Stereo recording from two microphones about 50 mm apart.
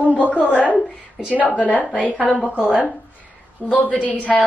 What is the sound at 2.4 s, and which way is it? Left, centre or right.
Speech, right.